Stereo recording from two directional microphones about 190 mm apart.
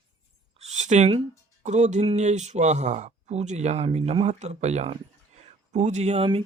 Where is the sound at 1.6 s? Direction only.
40° right (ahead or behind).